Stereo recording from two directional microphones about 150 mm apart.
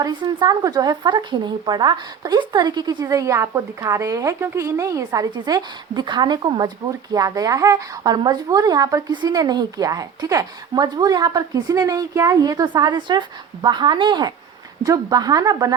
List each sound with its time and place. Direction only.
0.0 s speech: 30° right (ahead or behind)